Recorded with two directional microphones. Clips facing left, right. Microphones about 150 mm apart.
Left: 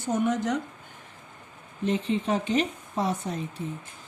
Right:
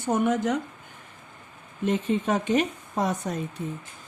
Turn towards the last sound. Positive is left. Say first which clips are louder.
# right 1 dB
turn(degrees=-45)  # may be behind; listen again after turning